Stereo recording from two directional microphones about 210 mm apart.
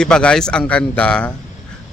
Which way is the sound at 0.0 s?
5° left (ahead or behind).